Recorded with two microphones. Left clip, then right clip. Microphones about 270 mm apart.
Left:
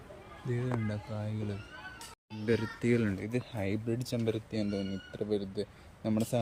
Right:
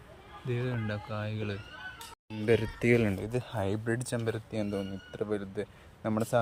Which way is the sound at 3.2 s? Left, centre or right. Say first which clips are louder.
Right 2 dB; right.